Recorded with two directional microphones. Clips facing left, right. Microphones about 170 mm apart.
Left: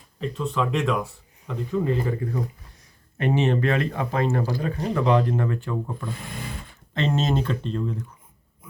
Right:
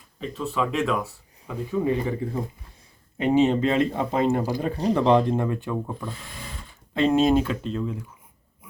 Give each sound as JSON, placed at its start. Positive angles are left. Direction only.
{"t": 0.2, "sound": "speech", "side_deg": 0}
{"t": 3.2, "sound": "speech", "side_deg": -15}
{"t": 4.7, "sound": "speech", "side_deg": -30}
{"t": 6.9, "sound": "speech", "side_deg": -10}